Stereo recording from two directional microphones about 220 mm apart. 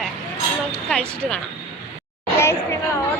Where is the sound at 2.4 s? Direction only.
10° left (ahead or behind).